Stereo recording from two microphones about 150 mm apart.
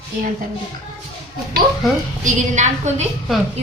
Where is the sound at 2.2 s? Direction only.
55° right (ahead or behind).